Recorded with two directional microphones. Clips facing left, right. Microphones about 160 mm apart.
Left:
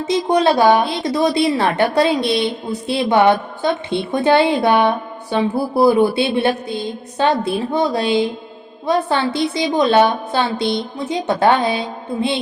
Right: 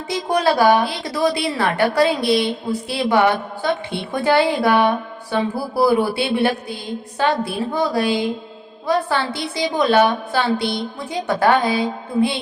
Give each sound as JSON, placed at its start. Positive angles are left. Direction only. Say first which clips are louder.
{"t": 0.0, "sound": "a woman's voice", "louder": "left 4 dB", "side_deg": 20}